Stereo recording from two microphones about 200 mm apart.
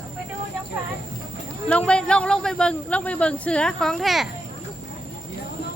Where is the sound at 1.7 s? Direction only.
5° left (ahead or behind).